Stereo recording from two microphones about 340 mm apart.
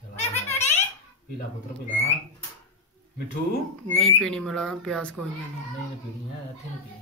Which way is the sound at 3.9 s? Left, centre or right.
Centre.